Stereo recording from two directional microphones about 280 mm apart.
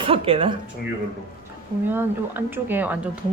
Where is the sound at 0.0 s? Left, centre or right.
Centre.